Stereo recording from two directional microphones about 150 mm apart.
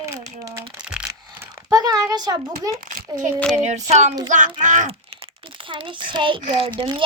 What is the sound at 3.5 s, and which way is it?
Child singing, 50° right (ahead or behind).